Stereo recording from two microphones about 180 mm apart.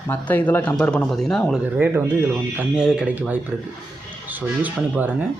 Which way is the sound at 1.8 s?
15° right (ahead or behind).